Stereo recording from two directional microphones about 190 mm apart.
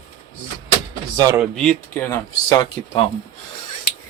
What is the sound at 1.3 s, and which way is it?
Speech, 5° left (ahead or behind).